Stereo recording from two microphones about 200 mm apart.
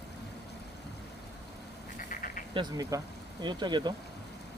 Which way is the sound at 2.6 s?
20° right (ahead or behind).